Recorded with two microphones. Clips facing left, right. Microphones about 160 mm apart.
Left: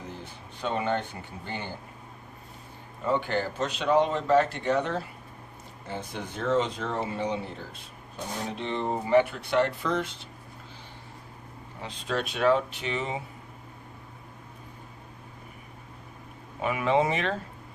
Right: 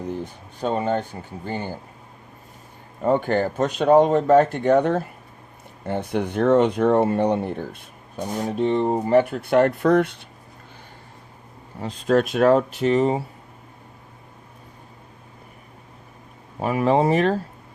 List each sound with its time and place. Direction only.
0.6 s speech: 40° right (ahead or behind)
3.0 s speech: 50° right (ahead or behind)
11.8 s speech: 45° right (ahead or behind)
16.6 s speech: 40° right (ahead or behind)